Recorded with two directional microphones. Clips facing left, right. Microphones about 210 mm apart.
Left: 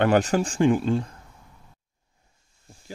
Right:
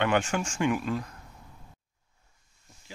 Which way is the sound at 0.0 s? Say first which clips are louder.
Left 6 dB; 40° left (ahead or behind).